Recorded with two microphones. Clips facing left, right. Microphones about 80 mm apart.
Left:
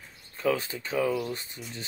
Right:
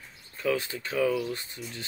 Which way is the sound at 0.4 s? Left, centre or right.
Left.